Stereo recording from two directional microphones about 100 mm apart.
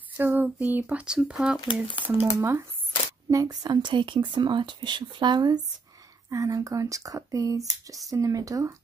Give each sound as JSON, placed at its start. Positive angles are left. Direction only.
{"t": 0.2, "sound": "speech", "side_deg": -20}
{"t": 1.6, "sound": "speech", "side_deg": 55}
{"t": 2.3, "sound": "speech", "side_deg": -25}
{"t": 3.3, "sound": "speech", "side_deg": -40}
{"t": 6.3, "sound": "speech", "side_deg": -35}